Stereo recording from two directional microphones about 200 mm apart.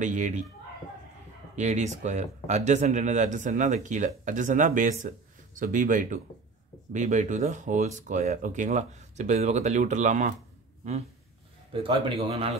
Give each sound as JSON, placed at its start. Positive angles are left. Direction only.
{"t": 0.0, "sound": "speech", "side_deg": -40}
{"t": 1.5, "sound": "speech", "side_deg": -35}
{"t": 11.7, "sound": "a man's voice", "side_deg": -25}